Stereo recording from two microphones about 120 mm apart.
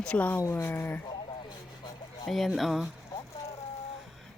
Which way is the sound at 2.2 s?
Centre (ahead or behind).